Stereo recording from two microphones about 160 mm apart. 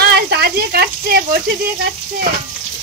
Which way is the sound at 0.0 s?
75° right (ahead or behind).